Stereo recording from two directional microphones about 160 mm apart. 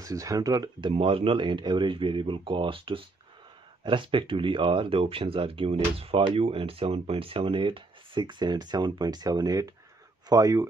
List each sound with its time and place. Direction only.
0.0 s speech: 20° right (ahead or behind)